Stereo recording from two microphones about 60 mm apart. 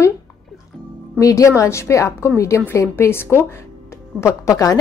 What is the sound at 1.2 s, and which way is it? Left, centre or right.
Speech, left.